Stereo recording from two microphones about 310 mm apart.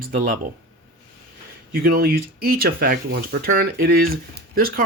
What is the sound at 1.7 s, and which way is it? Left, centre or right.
Speech, right.